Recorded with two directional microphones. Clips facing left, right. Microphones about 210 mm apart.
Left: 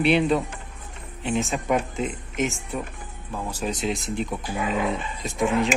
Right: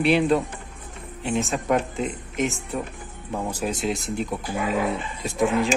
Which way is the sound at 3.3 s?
20° right (ahead or behind).